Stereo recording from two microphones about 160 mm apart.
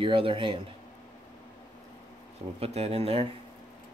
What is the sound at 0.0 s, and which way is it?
Speech, 35° right (ahead or behind).